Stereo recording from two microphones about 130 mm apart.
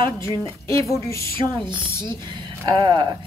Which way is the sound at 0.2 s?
25° left (ahead or behind).